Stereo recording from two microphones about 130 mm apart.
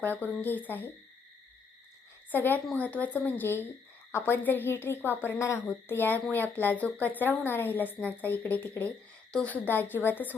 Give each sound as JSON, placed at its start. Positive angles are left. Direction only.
{"t": 0.0, "sound": "a woman's voice", "side_deg": 15}
{"t": 2.3, "sound": "a woman's voice", "side_deg": 15}